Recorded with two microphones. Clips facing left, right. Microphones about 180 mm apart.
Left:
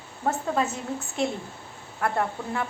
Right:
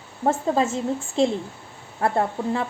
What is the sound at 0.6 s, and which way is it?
A woman's voice, 25° right (ahead or behind).